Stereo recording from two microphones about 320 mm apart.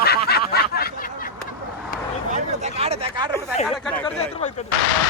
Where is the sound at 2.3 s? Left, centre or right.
Centre.